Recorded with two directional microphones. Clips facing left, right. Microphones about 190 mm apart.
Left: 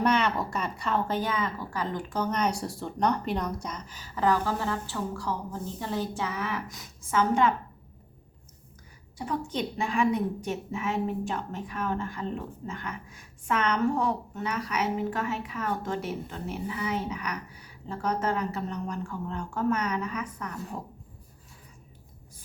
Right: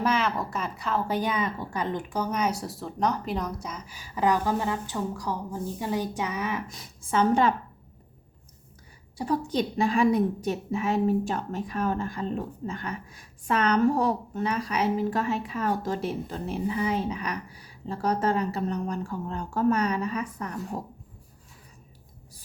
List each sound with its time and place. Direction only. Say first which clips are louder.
0.0 s speech: left 1 dB; centre (ahead or behind)
6.7 s a woman's voice: right 1 dB; 30° right (ahead or behind)
9.1 s a woman's voice: right 5 dB; 35° right (ahead or behind)